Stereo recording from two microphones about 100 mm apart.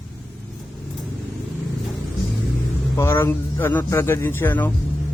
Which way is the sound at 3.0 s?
25° left (ahead or behind).